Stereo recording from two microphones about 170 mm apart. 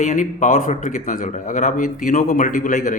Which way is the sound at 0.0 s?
45° left (ahead or behind).